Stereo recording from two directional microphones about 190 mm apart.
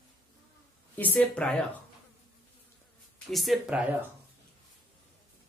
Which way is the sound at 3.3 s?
Centre (ahead or behind).